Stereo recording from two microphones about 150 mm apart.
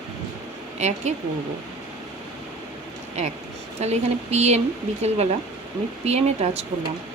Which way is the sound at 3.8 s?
45° right (ahead or behind).